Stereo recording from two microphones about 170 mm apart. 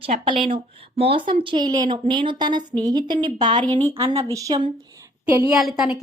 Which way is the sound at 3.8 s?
35° right (ahead or behind).